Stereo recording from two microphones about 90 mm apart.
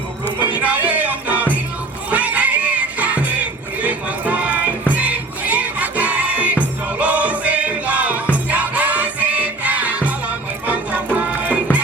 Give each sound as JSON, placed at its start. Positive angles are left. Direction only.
{"t": 0.6, "sound": "music", "side_deg": -15}